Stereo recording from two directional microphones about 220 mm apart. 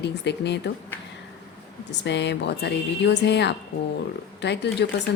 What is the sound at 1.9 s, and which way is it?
A woman's voice, 55° left (ahead or behind).